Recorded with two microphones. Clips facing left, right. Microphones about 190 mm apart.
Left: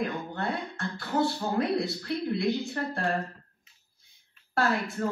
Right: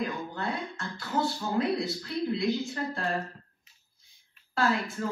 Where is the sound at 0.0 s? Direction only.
60° left (ahead or behind).